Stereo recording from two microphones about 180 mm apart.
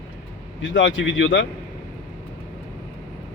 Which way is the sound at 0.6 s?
90° left.